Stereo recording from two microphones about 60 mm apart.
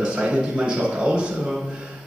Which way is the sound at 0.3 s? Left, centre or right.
Right.